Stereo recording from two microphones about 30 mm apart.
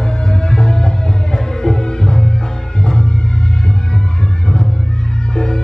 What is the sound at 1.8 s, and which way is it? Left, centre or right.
Music, left.